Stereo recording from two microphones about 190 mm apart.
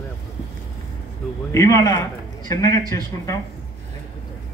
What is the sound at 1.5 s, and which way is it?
A man's voice, 15° left (ahead or behind).